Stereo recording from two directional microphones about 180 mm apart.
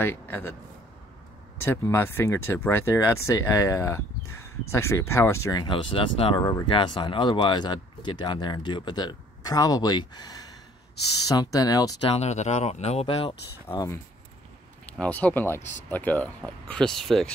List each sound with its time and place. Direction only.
0.0 s a man's voice: 10° left (ahead or behind)
1.6 s speech: 15° left (ahead or behind)
12.2 s speech: 40° left (ahead or behind)
14.9 s speech: 10° left (ahead or behind)